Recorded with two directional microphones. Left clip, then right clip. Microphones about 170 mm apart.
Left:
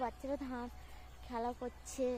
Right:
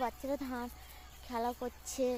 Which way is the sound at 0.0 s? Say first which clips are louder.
Right 3 dB; 55° right (ahead or behind).